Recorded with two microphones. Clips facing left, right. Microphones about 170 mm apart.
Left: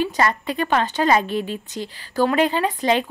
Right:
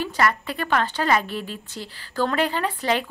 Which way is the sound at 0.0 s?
20° left (ahead or behind).